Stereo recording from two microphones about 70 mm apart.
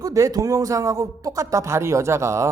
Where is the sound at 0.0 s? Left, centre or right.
Right.